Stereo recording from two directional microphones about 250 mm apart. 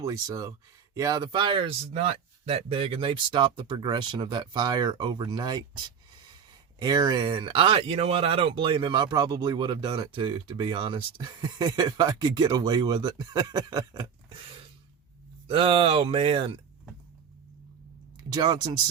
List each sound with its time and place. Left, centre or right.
0.0 s speech: centre
6.7 s speech: centre
15.4 s speech: right
18.2 s speech: centre